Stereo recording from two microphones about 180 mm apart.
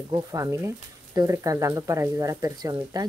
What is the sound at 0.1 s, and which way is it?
Speech, 20° right (ahead or behind).